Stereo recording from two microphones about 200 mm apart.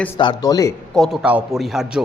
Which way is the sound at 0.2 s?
20° left (ahead or behind).